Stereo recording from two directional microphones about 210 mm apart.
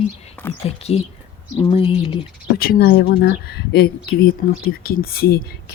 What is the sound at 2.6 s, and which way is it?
Speech, 45° left (ahead or behind).